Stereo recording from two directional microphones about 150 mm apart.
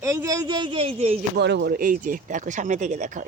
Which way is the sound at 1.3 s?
85° right.